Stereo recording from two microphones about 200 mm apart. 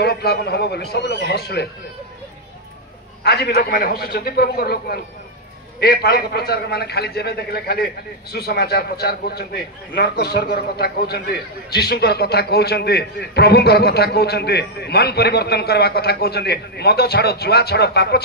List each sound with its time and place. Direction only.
0.0 s a man's voice: 50° left (ahead or behind)
3.3 s a man's voice: 50° left (ahead or behind)